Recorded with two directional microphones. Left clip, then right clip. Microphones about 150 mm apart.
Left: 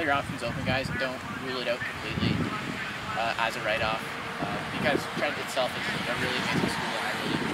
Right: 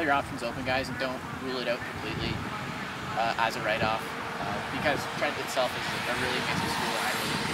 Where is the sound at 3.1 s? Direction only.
Centre (ahead or behind).